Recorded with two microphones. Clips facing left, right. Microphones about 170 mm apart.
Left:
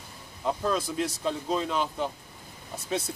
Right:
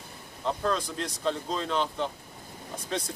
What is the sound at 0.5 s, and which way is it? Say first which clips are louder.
Speech: left 1 dB; 10° left (ahead or behind).